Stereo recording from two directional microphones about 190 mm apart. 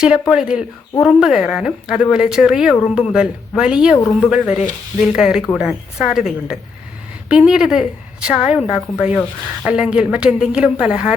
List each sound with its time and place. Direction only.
0.0 s a woman's voice: 5° right (ahead or behind)